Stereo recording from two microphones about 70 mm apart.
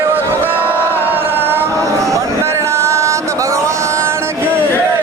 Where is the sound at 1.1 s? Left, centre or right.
Right.